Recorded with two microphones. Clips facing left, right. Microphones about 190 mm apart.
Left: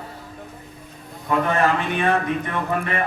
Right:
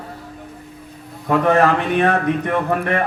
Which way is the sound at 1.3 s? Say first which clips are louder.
Right 5 dB; 60° right (ahead or behind).